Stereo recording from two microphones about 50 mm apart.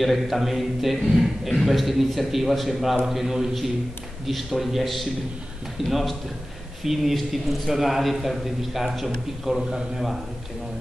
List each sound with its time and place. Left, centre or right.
0.0 s a man's voice: centre